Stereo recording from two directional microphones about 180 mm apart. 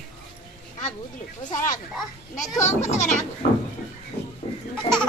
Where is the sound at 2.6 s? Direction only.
40° left (ahead or behind).